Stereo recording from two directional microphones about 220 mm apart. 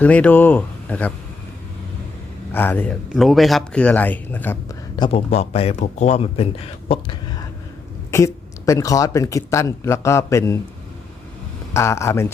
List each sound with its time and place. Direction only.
0.0 s speech: 5° left (ahead or behind)
2.5 s speech: 10° left (ahead or behind)
4.9 s speech: 25° left (ahead or behind)
8.1 s speech: 15° left (ahead or behind)
11.7 s speech: 10° left (ahead or behind)